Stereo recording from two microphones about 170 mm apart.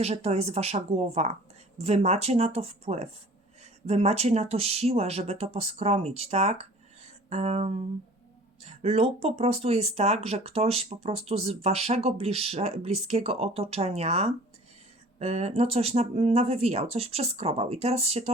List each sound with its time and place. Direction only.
0.0 s speech: 40° right (ahead or behind)